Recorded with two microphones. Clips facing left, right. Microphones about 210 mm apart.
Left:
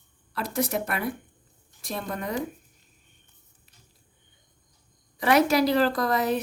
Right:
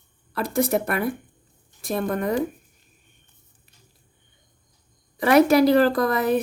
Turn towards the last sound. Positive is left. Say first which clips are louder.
# right 4 dB
turn(degrees=-55)  # may be behind; listen again after turning